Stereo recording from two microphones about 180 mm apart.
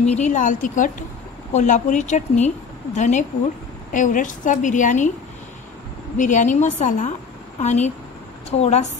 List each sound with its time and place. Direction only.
0.0 s a woman's voice: 40° left (ahead or behind)
6.1 s a woman's voice: 45° left (ahead or behind)